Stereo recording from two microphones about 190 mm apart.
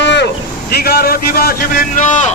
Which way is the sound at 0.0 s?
65° left (ahead or behind).